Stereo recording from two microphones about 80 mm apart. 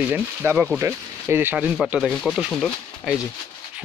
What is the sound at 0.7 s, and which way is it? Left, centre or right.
Speech, right.